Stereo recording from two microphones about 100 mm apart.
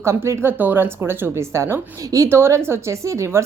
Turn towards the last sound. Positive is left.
turn(degrees=-30)  # may be behind; listen again after turning